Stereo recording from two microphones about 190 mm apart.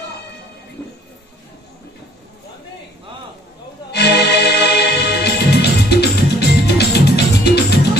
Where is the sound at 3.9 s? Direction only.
60° left (ahead or behind).